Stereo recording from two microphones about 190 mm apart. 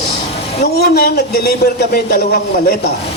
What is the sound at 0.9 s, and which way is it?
Speech, 55° left (ahead or behind).